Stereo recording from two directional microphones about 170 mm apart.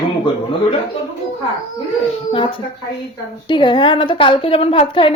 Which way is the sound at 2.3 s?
30° left (ahead or behind).